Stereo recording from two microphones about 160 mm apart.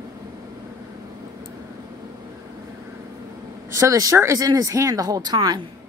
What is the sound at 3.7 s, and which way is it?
Speech, 20° right (ahead or behind).